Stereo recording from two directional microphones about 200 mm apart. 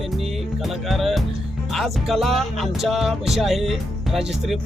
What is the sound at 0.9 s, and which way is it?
Music, centre (ahead or behind).